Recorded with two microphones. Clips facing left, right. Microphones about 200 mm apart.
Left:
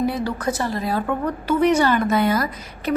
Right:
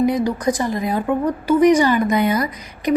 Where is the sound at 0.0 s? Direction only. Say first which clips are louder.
Right 5 dB; 15° right (ahead or behind).